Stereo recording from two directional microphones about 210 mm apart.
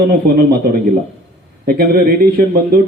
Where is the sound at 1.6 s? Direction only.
45° right (ahead or behind).